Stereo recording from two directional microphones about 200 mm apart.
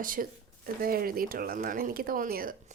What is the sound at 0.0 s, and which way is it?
A woman's voice, 45° right (ahead or behind).